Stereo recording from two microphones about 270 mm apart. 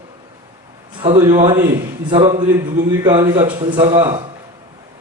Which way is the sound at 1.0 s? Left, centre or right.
Centre.